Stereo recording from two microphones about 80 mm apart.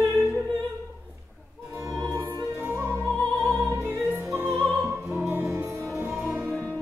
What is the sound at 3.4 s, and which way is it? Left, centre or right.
Music, right.